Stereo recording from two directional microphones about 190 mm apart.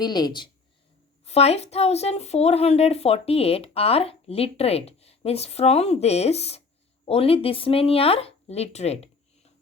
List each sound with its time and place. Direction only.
0.0 s speech: 20° left (ahead or behind)
1.2 s a woman's voice: 35° left (ahead or behind)